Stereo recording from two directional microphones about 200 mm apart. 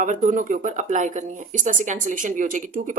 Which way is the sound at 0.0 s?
40° right (ahead or behind).